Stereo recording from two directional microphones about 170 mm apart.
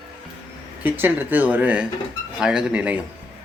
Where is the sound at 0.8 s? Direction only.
10° right (ahead or behind).